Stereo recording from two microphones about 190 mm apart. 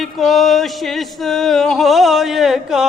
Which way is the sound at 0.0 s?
Centre (ahead or behind).